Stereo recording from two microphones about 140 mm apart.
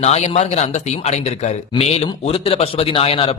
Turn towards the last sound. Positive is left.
turn(degrees=45)  # may be behind; listen again after turning